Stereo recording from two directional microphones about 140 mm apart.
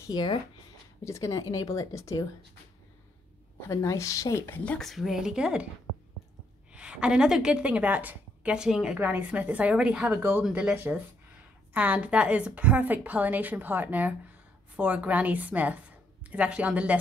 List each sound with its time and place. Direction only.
0.0 s speech: 30° left (ahead or behind)
1.0 s speech: 20° left (ahead or behind)
3.6 s speech: 20° left (ahead or behind)
4.7 s speech: centre (ahead or behind)
6.7 s a woman's voice: 5° right (ahead or behind)